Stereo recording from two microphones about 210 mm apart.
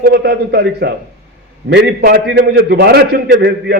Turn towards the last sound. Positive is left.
turn(degrees=-50)  # may be behind; listen again after turning